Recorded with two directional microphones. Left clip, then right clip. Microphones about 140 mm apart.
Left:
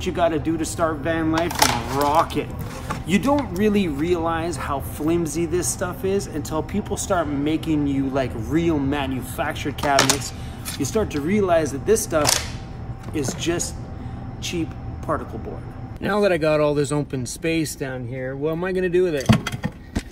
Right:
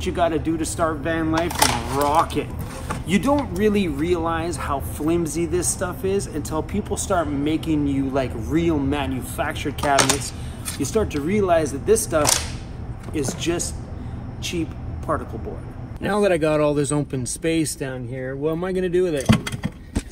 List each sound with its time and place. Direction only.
0.0 s speech: 5° left (ahead or behind)
15.1 s speech: 5° left (ahead or behind)
16.0 s speech: 25° left (ahead or behind)
18.5 s speech: 35° left (ahead or behind)